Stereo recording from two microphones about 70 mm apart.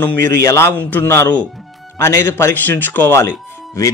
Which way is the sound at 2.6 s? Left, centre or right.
Left.